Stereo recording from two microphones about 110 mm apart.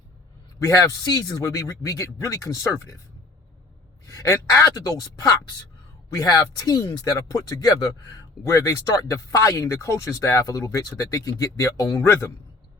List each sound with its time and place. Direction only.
0.6 s a man's voice: 30° left (ahead or behind)
4.0 s speech: 30° left (ahead or behind)